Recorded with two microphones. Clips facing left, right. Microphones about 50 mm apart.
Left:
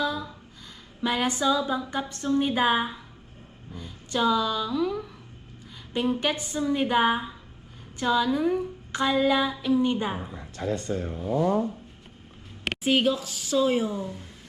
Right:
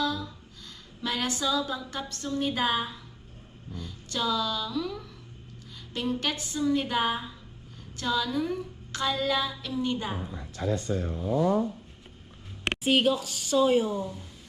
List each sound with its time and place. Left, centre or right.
0.0 s a sound: centre
3.8 s speech: centre
5.9 s a sound: centre
7.9 s female singing: centre
10.7 s speech: left
12.6 s speech: centre